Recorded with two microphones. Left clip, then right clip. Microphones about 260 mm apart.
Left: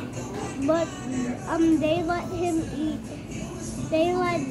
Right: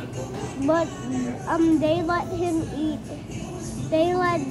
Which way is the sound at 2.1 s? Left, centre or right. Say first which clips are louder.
Right 2 dB; right.